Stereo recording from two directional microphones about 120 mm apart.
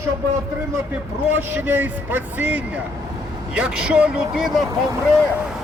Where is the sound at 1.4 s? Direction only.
15° right (ahead or behind).